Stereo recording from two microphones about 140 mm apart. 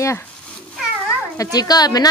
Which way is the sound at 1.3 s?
25° left (ahead or behind).